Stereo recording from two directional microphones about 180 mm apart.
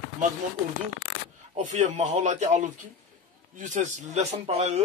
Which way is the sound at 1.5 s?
40° right (ahead or behind).